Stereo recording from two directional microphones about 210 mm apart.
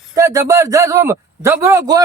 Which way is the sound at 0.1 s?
15° right (ahead or behind).